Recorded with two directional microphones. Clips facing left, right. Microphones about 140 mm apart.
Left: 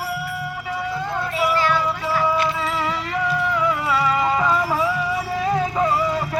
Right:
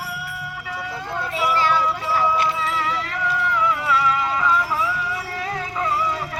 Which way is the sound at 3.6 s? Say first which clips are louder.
Right 1 dB; 45° left (ahead or behind).